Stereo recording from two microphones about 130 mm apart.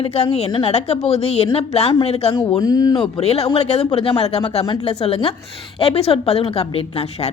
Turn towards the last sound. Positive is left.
turn(degrees=50)  # may be behind; listen again after turning